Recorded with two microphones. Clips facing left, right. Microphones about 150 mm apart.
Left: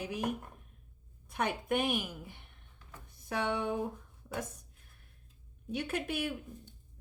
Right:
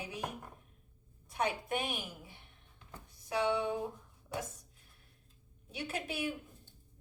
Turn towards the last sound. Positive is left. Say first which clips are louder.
# left 3 dB
turn(degrees=55)  # may be behind; listen again after turning